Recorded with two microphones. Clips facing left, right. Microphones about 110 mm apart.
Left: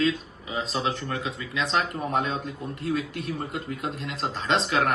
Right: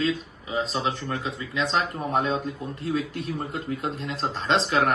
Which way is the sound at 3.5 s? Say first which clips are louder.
Right 2 dB; 35° right (ahead or behind).